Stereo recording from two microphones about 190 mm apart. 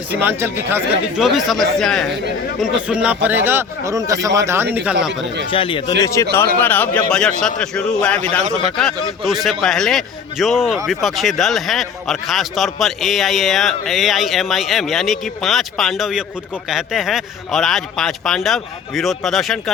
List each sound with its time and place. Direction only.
0.1 s a man's voice: 10° right (ahead or behind)
5.5 s speech: 30° left (ahead or behind)
6.0 s a man's voice: 15° left (ahead or behind); by 19.7 s centre (ahead or behind)